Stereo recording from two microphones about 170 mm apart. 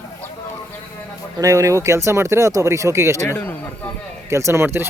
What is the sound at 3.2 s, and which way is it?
Speech, 10° left (ahead or behind).